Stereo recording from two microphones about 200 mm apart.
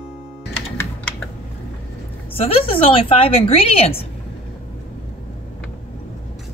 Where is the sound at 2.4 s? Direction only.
30° left (ahead or behind).